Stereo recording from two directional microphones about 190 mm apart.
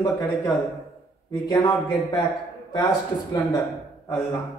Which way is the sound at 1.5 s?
15° left (ahead or behind).